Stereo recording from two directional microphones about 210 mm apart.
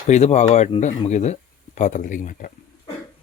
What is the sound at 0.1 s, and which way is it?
Speech, 35° left (ahead or behind).